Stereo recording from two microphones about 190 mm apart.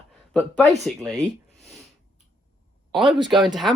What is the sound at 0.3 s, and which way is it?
Speech, 5° left (ahead or behind).